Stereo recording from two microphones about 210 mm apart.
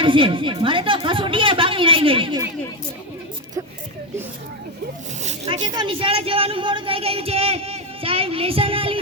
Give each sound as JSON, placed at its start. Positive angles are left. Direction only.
{"t": 0.0, "sound": "a woman's voice", "side_deg": -25}
{"t": 5.2, "sound": "speech", "side_deg": -35}
{"t": 5.6, "sound": "speech", "side_deg": -20}